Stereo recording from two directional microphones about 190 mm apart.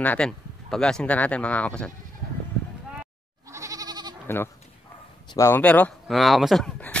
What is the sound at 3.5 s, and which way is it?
Goat, 15° right (ahead or behind).